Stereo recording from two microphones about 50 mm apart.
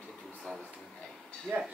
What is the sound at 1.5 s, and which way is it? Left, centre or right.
Speech, right.